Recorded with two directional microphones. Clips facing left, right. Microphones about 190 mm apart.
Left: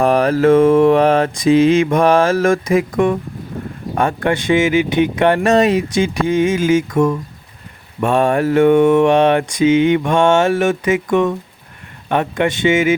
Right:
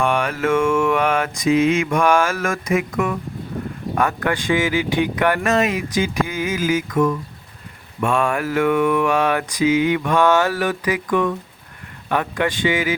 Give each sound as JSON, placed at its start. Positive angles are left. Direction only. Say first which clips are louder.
{"t": 0.0, "sound": "mantra", "louder": "left 7 dB", "side_deg": 35}